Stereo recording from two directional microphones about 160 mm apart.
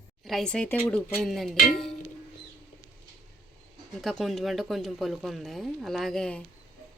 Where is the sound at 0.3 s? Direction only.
5° left (ahead or behind).